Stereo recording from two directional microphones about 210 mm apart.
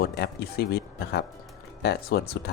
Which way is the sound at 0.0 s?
50° left (ahead or behind).